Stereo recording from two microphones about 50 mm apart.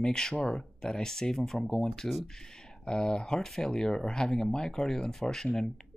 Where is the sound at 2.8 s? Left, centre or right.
Centre.